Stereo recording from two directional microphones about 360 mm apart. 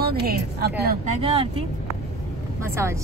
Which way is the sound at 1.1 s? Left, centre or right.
Centre.